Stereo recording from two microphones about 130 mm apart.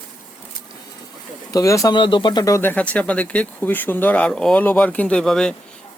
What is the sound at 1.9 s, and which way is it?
Speech, 40° left (ahead or behind).